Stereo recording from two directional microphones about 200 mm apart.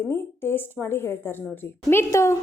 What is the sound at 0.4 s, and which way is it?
A woman's voice, 10° left (ahead or behind).